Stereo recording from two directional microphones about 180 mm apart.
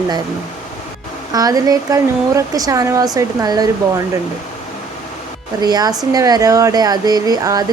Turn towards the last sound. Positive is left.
turn(degrees=-20)  # may be behind; listen again after turning